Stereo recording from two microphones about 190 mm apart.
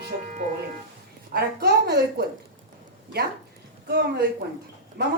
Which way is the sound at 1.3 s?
55° right (ahead or behind).